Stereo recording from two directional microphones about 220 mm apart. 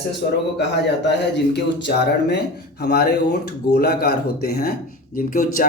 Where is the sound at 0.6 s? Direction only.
50° left (ahead or behind).